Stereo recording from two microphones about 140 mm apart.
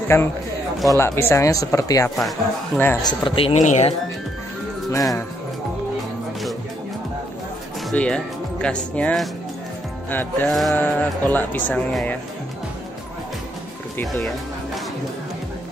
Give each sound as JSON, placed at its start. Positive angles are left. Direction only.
{"t": 0.1, "sound": "speech", "side_deg": 20}
{"t": 2.0, "sound": "speech", "side_deg": 0}
{"t": 3.0, "sound": "speech", "side_deg": 35}
{"t": 3.5, "sound": "speech", "side_deg": 55}
{"t": 7.9, "sound": "speech", "side_deg": 10}
{"t": 10.5, "sound": "speech", "side_deg": 0}
{"t": 10.8, "sound": "speech", "side_deg": 10}